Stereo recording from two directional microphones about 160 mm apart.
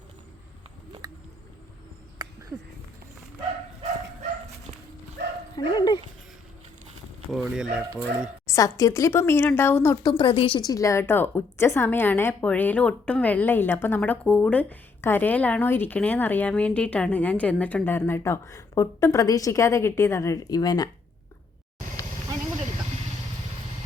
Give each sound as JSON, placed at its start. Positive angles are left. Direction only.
{"t": 2.2, "sound": "a sound", "side_deg": -25}
{"t": 5.5, "sound": "dog", "side_deg": 25}
{"t": 7.3, "sound": "speech", "side_deg": 0}
{"t": 8.4, "sound": "speech", "side_deg": 20}
{"t": 10.0, "sound": "speech", "side_deg": 30}